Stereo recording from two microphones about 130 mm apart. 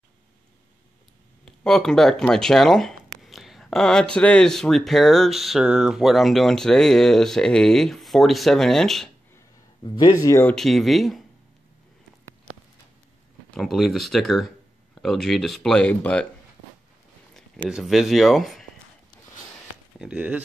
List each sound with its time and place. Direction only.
1.4 s speech: 5° left (ahead or behind)
9.8 s speech: 30° left (ahead or behind)
10.4 s speech: 5° left (ahead or behind)
13.6 s speech: centre (ahead or behind)
17.3 s speech: 5° right (ahead or behind)
20.0 s speech: 5° right (ahead or behind)